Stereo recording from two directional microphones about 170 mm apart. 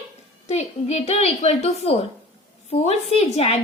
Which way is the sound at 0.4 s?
40° left (ahead or behind).